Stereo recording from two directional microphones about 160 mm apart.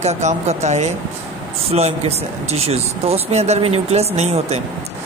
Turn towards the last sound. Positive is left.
turn(degrees=-40)  # may be behind; listen again after turning